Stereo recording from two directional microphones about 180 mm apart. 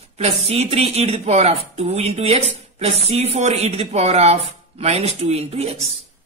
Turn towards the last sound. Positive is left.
turn(degrees=-35)  # may be behind; listen again after turning